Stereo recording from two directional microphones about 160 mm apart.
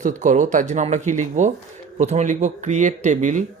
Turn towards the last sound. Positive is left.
turn(degrees=-50)  # may be behind; listen again after turning